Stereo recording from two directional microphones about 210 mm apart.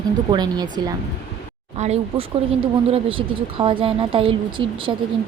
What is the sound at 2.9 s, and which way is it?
A woman's voice, 25° right (ahead or behind).